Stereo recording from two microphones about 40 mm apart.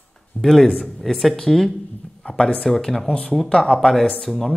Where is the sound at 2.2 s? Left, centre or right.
Centre.